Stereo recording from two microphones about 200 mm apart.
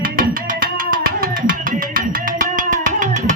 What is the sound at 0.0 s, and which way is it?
Music, 45° right (ahead or behind).